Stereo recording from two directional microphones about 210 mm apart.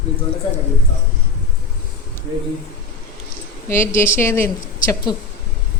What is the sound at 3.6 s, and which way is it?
Speech, 10° left (ahead or behind).